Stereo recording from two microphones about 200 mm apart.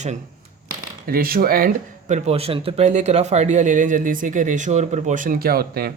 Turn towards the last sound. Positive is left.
turn(degrees=-50)  # may be behind; listen again after turning